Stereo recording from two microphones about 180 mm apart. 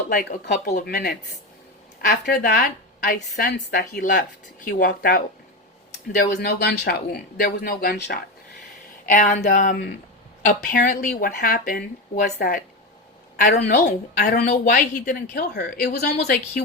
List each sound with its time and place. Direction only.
0.1 s a woman's voice: 60° left (ahead or behind)
0.7 s a woman's voice: 50° left (ahead or behind)
9.0 s speech: 45° left (ahead or behind)
13.3 s a woman's voice: 60° left (ahead or behind)